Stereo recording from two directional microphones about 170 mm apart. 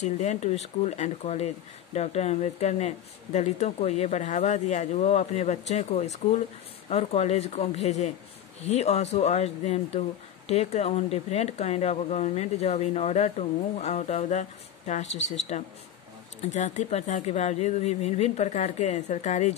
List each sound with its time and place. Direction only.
0.0 s speech: 45° left (ahead or behind)